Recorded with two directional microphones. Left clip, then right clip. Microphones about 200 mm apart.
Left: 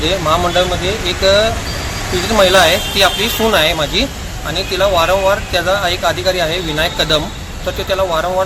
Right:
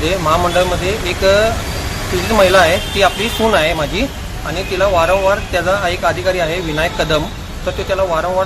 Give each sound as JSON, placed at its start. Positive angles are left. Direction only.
{"t": 0.3, "sound": "speech", "side_deg": -5}